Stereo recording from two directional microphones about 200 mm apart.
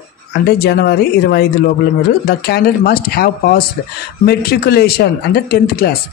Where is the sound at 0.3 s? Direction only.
55° left (ahead or behind).